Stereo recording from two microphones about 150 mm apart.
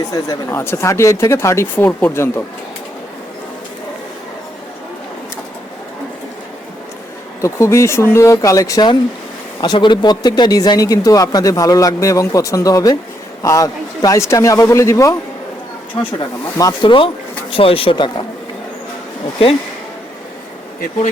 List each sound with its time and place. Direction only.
0.1 s speech: 20° left (ahead or behind)
7.4 s speech: 20° left (ahead or behind)
16.1 s speech: 25° left (ahead or behind)